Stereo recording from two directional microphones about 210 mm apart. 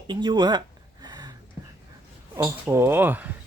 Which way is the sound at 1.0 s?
20° right (ahead or behind).